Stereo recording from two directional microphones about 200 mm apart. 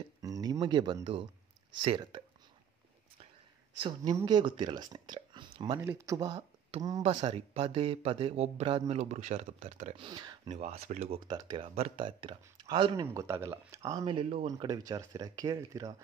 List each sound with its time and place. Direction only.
0.2 s a sound: 20° right (ahead or behind)
1.8 s speech: 25° right (ahead or behind)
3.8 s speech: 25° right (ahead or behind)
5.8 s speech: 10° right (ahead or behind); by 10.0 s 35° right (ahead or behind)
10.0 s speech: 20° right (ahead or behind)
10.5 s speech: 35° right (ahead or behind)
11.2 s speech: 20° right (ahead or behind)
14.0 s speech: 30° right (ahead or behind)